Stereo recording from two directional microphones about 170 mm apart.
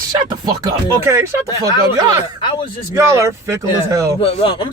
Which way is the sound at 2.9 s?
15° right (ahead or behind).